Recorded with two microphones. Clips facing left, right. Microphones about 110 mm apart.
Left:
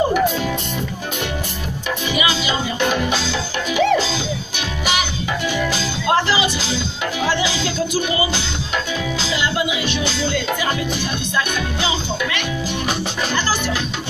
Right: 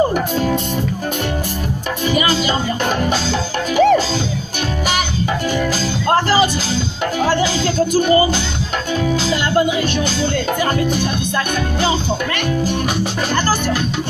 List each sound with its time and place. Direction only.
2.0 s music: 45° right (ahead or behind)
6.0 s music: 45° right (ahead or behind)
13.3 s music: 45° right (ahead or behind)